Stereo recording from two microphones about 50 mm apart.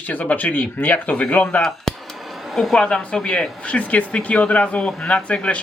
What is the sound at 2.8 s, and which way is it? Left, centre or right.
A man's voice, centre.